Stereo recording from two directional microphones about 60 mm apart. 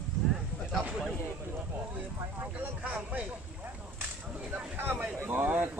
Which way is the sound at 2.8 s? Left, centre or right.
Right.